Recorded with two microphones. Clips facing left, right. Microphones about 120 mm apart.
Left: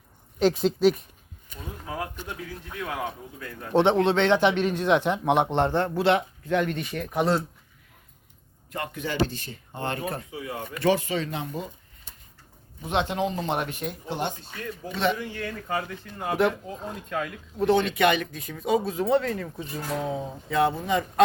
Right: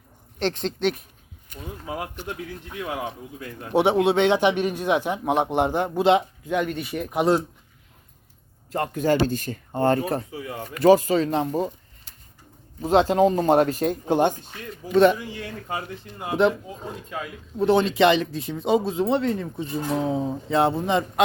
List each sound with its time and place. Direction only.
0.3 s speech: 5° left (ahead or behind)
2.7 s speech: 15° right (ahead or behind)
8.7 s speech: 40° right (ahead or behind)
12.8 s speech: 35° right (ahead or behind)
15.7 s speech: 15° right (ahead or behind)
17.6 s speech: 30° right (ahead or behind)